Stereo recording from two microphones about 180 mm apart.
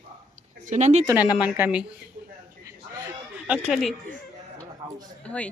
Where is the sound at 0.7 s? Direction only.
40° right (ahead or behind).